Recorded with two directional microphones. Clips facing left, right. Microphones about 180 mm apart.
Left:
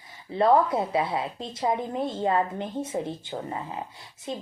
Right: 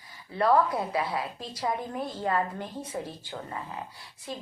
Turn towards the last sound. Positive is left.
turn(degrees=20)  # may be behind; listen again after turning